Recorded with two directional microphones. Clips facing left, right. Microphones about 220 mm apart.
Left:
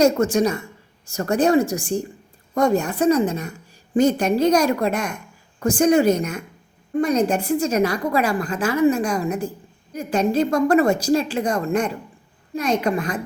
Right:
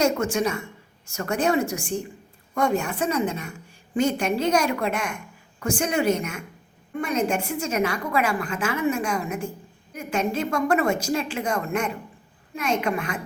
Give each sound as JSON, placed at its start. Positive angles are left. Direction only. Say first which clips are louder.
{"t": 0.0, "sound": "a woman's voice", "louder": "left 5 dB", "side_deg": 40}